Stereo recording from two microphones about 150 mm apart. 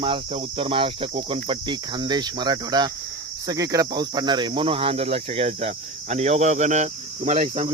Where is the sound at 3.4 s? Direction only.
25° right (ahead or behind).